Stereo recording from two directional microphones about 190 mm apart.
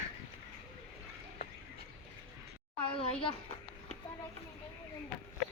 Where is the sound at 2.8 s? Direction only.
30° left (ahead or behind).